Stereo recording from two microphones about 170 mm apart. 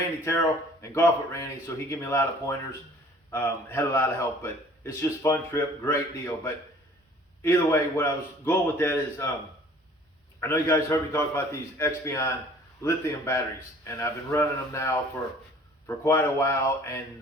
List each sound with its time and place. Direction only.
0.3 s a man's voice: 15° left (ahead or behind)
10.4 s a man's voice: 15° left (ahead or behind)